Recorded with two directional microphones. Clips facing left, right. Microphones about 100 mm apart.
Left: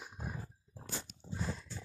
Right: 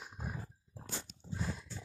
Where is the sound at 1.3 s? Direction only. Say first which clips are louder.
Even; centre (ahead or behind).